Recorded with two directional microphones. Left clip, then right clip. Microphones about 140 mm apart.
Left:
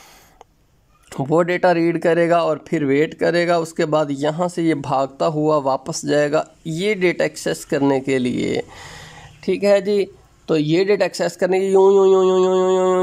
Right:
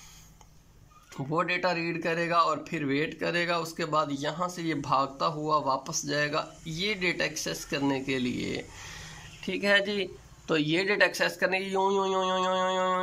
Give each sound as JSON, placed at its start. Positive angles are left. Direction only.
{"t": 1.1, "sound": "speech", "side_deg": 65}
{"t": 9.4, "sound": "speech", "side_deg": 35}